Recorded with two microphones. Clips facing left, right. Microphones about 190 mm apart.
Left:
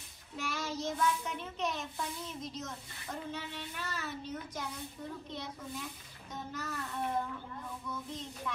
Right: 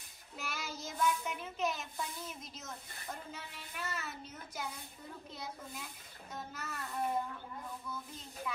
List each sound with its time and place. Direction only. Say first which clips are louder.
0.4 s a child's voice: left 6 dB; centre (ahead or behind)
5.3 s speech: left 4 dB; centre (ahead or behind)
7.9 s child singing: left 5 dB; 5° right (ahead or behind)